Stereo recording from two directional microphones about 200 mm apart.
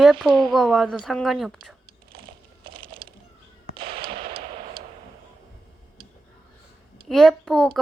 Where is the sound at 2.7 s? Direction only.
25° right (ahead or behind).